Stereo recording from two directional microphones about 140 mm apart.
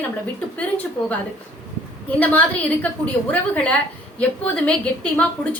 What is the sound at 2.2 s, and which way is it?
A woman's voice, 10° left (ahead or behind).